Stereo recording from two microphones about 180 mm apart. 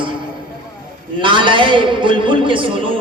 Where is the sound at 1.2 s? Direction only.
25° right (ahead or behind).